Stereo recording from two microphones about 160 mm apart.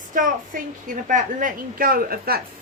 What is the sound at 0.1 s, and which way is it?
A woman's voice, 55° right (ahead or behind).